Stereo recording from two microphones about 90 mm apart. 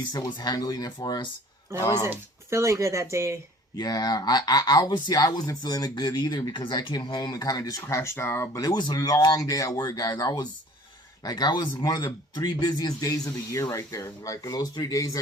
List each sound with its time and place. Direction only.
0.3 s speech: 55° left (ahead or behind)
2.0 s speech: 30° right (ahead or behind)
3.8 s speech: 50° left (ahead or behind)